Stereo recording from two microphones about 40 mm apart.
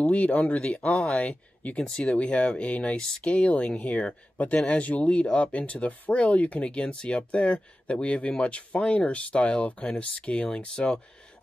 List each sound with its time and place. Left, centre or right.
0.1 s speech: left
1.8 s speech: left
6.6 s speech: left